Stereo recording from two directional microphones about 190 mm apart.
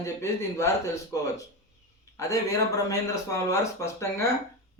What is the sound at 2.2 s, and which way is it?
Speech, 15° left (ahead or behind).